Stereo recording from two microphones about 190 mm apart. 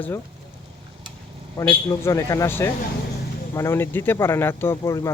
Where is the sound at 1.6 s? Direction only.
15° left (ahead or behind).